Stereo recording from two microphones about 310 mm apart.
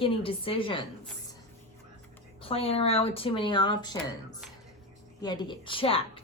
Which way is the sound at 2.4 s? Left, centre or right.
Centre.